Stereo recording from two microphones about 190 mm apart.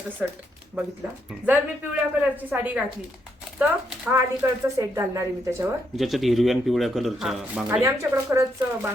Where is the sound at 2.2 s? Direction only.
10° right (ahead or behind).